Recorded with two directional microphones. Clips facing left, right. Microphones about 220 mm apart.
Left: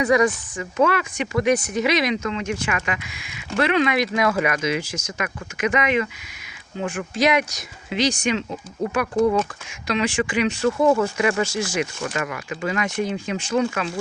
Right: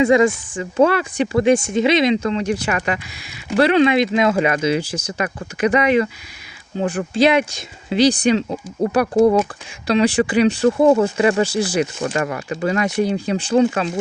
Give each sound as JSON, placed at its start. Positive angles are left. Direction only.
{"t": 0.0, "sound": "speech", "side_deg": -25}
{"t": 9.8, "sound": "speech", "side_deg": -35}